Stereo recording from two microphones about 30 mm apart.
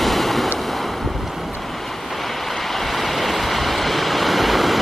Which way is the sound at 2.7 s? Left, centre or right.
Centre.